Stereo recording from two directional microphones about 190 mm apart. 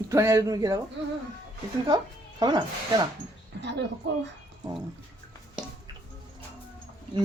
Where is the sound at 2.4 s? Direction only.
25° right (ahead or behind).